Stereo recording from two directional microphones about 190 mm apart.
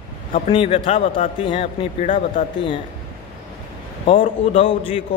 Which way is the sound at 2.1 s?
40° left (ahead or behind).